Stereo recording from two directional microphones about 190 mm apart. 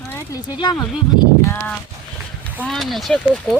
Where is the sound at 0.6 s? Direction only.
20° left (ahead or behind).